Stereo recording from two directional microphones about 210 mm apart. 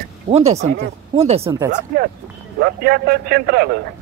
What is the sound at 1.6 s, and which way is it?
Speech, 40° right (ahead or behind).